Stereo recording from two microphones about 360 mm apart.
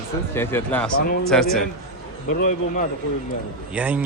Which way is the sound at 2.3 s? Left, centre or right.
Left.